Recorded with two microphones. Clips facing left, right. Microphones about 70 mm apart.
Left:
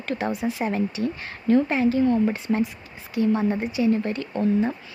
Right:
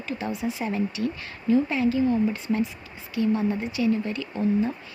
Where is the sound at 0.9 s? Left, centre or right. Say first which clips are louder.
Left 2 dB; left.